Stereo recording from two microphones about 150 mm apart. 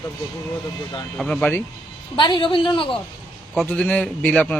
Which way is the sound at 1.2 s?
5° left (ahead or behind).